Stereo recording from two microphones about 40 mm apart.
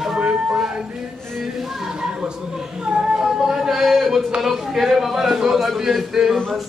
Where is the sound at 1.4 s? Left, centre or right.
Centre.